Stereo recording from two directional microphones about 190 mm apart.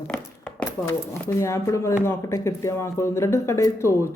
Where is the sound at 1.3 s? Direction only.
15° left (ahead or behind).